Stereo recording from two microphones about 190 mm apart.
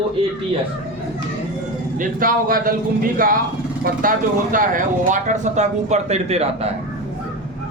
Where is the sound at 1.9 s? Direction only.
45° right (ahead or behind).